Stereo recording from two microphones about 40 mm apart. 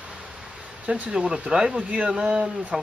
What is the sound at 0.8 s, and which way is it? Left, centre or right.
Speech, right.